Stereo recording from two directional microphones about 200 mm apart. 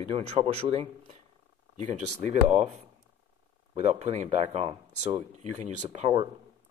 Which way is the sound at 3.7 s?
35° right (ahead or behind).